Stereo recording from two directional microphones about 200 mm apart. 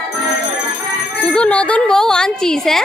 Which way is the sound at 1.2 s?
5° left (ahead or behind).